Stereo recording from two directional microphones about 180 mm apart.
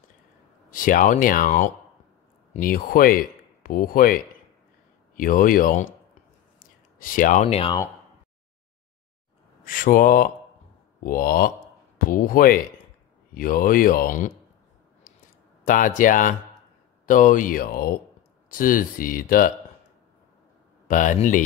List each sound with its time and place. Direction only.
0.7 s speech: 50° left (ahead or behind)
6.6 s a sound: 50° left (ahead or behind)
9.7 s speech: 50° left (ahead or behind)
15.6 s speech: 45° left (ahead or behind)
20.8 s speech: 45° left (ahead or behind)